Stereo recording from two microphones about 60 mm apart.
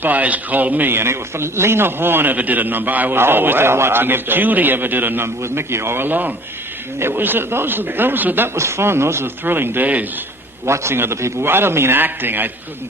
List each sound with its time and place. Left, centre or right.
0.0 s a man's voice: right
5.4 s a man's voice: right
8.5 s speech: right
9.4 s a man's voice: right
10.7 s speech: right
11.3 s a man's voice: right